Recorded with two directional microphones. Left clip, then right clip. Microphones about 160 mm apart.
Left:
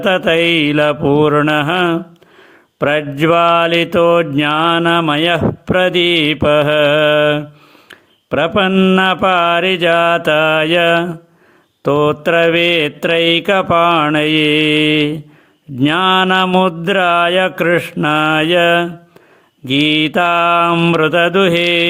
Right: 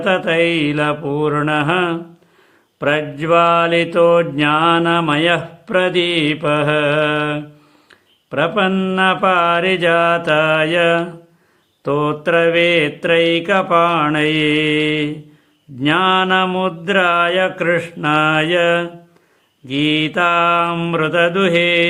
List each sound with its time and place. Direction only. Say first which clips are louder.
0.0 s mantra: left 3 dB; 35° left (ahead or behind)